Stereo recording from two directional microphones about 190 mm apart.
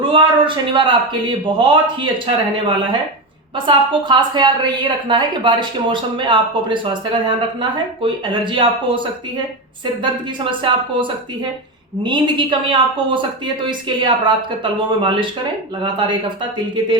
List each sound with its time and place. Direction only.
0.0 s a woman's voice: 25° right (ahead or behind)
10.0 s a woman's voice: 25° right (ahead or behind)